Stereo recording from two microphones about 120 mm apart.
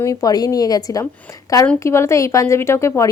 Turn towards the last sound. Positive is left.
turn(degrees=20)  # may be behind; listen again after turning